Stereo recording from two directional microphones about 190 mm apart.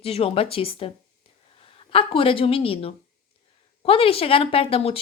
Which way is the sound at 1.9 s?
30° left (ahead or behind).